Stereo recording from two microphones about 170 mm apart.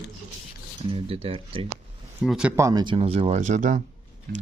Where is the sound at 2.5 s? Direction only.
20° right (ahead or behind); by 3.8 s 45° right (ahead or behind).